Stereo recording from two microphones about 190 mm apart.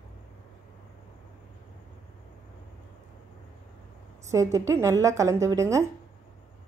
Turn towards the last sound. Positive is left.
turn(degrees=-15)  # may be behind; listen again after turning